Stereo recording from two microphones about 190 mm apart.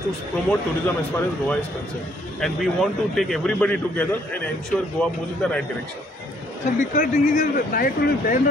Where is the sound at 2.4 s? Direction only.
Centre (ahead or behind).